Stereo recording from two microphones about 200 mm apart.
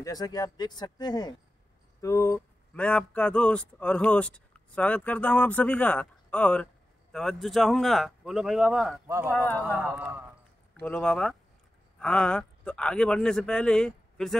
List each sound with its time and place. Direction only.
0.0 s a man's voice: 20° left (ahead or behind); by 9.0 s centre (ahead or behind)
9.0 s speech: 15° right (ahead or behind)
9.3 s speech: 10° left (ahead or behind)
9.9 s speech: 10° right (ahead or behind)
10.8 s a man's voice: 5° left (ahead or behind)